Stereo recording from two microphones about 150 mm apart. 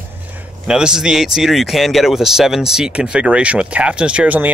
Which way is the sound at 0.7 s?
5° right (ahead or behind).